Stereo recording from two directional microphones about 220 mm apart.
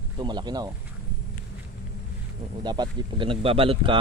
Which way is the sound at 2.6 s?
20° right (ahead or behind).